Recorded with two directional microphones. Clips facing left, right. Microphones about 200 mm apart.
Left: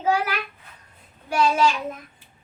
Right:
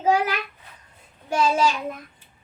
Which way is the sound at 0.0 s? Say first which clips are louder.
Right 2 dB; 20° right (ahead or behind).